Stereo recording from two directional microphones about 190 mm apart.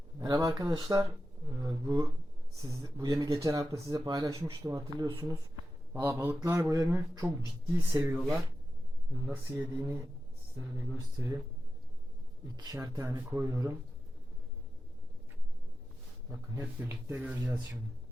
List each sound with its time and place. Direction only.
0.2 s speech: 20° right (ahead or behind)
9.2 s speech: 10° right (ahead or behind)
11.2 s speech: 15° right (ahead or behind)
12.5 s speech: 20° right (ahead or behind)
16.6 s speech: 10° right (ahead or behind)